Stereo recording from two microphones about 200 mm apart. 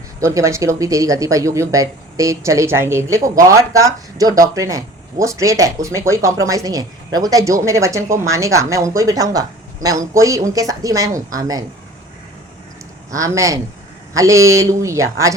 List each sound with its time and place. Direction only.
0.2 s speech: 15° right (ahead or behind)
13.1 s speech: 15° right (ahead or behind)